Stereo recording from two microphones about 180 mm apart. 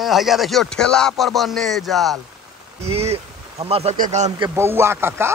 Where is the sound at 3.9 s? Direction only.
45° right (ahead or behind).